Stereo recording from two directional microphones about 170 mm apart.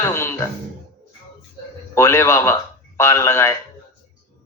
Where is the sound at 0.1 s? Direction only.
15° left (ahead or behind).